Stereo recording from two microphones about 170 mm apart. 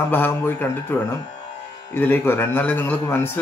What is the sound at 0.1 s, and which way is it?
Speech, 10° left (ahead or behind).